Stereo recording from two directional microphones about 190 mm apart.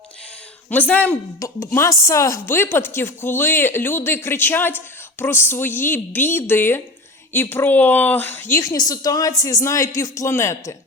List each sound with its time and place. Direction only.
0.7 s a woman's voice: 10° left (ahead or behind)